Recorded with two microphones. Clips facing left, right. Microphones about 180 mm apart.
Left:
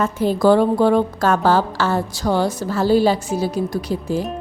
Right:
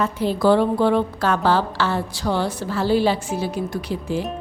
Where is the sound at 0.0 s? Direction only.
45° left (ahead or behind).